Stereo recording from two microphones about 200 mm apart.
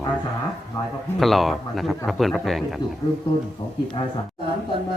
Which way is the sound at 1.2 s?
Centre (ahead or behind).